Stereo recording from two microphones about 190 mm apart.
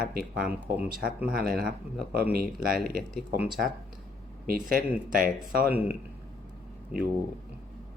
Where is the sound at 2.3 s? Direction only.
50° right (ahead or behind).